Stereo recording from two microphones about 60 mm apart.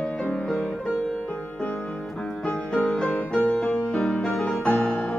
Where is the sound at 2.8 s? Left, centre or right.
Centre.